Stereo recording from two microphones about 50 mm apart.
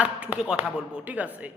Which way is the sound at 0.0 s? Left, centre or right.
Right.